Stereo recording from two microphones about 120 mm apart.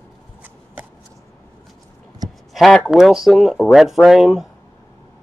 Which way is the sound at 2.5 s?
Centre (ahead or behind).